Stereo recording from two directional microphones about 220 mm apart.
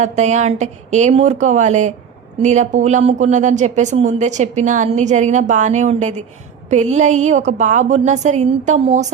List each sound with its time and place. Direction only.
0.0 s speech: 30° right (ahead or behind)